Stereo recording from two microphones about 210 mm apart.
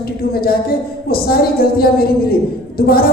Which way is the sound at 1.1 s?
45° left (ahead or behind).